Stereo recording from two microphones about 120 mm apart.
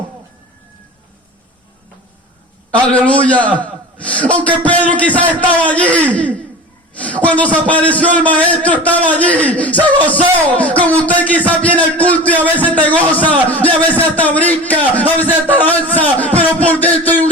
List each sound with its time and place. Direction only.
2.8 s a man's voice: 10° left (ahead or behind)